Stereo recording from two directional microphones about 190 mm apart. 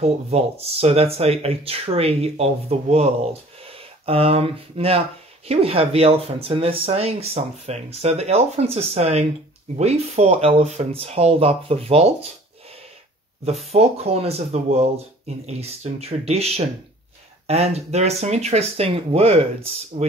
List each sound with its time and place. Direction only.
0.0 s speech: 35° right (ahead or behind)
13.7 s speech: 35° right (ahead or behind)